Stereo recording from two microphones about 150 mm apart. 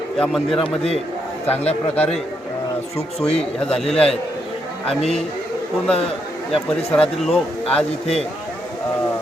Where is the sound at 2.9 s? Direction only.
40° left (ahead or behind).